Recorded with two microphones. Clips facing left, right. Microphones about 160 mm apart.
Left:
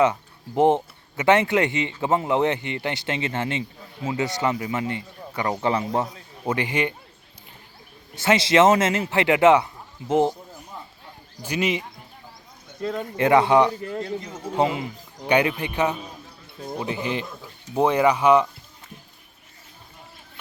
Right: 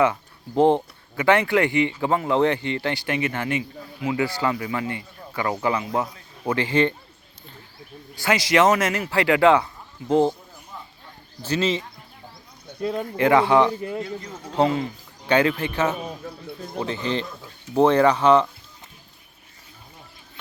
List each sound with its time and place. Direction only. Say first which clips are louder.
0.0 s speech: even; 20° left (ahead or behind)
6.4 s speech: right 3 dB; 15° left (ahead or behind)
8.1 s speech: left 2 dB; 25° left (ahead or behind)
11.4 s speech: right 2 dB; 15° left (ahead or behind)
12.8 s speech: right 2 dB; 20° right (ahead or behind)
13.1 s speech: even; 20° left (ahead or behind)